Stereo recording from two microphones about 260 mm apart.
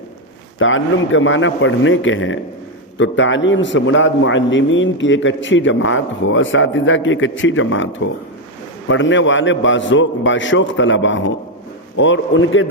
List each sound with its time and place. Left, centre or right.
0.6 s a man's voice: left
8.9 s a man's voice: left